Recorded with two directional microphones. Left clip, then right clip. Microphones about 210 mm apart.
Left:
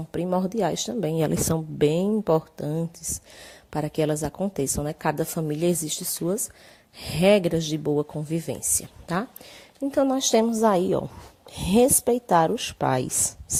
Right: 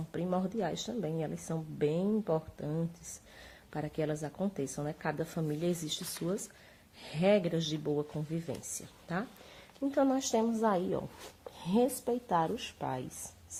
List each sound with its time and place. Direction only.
0.1 s a woman's voice: 30° left (ahead or behind)
9.9 s a woman's voice: 30° left (ahead or behind)